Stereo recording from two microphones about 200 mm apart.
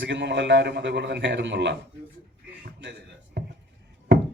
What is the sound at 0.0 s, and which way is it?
A man's voice, 65° right (ahead or behind).